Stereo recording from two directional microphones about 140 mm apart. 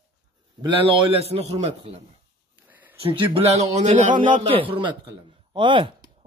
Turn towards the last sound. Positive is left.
turn(degrees=-35)  # may be behind; listen again after turning